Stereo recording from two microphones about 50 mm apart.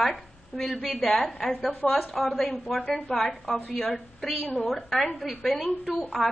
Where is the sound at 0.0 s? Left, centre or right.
Centre.